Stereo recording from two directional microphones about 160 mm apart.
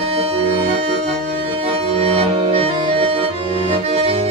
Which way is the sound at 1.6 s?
40° right (ahead or behind).